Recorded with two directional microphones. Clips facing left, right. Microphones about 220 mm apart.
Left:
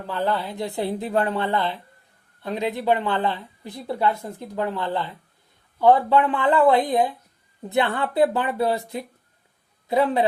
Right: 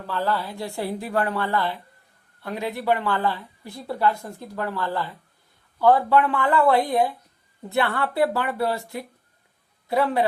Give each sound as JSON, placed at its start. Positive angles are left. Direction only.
{"t": 0.0, "sound": "speech", "side_deg": 20}
{"t": 9.9, "sound": "speech", "side_deg": 20}